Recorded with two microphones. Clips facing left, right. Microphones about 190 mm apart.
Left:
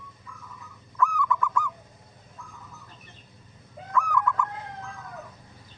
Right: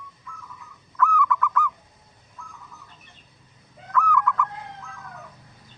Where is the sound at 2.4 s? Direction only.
35° left (ahead or behind).